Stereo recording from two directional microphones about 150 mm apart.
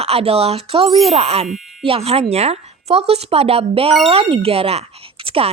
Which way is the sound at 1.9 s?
40° right (ahead or behind).